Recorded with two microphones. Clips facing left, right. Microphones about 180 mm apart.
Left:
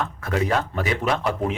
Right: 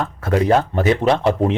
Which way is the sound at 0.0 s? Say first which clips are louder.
Right 6 dB; 35° right (ahead or behind).